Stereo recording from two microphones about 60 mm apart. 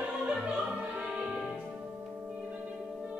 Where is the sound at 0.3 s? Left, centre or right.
Centre.